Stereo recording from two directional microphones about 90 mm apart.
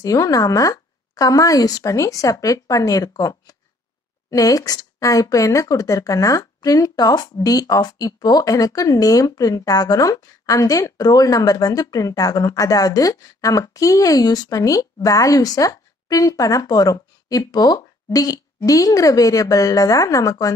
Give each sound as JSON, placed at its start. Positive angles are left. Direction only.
{"t": 0.0, "sound": "speech", "side_deg": 40}